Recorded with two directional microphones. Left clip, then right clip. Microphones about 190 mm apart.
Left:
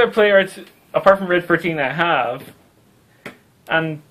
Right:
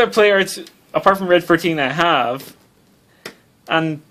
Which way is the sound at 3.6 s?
55° right (ahead or behind).